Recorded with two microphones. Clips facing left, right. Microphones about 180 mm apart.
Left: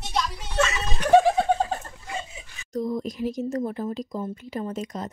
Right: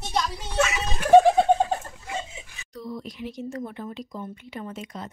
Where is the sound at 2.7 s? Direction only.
45° left (ahead or behind).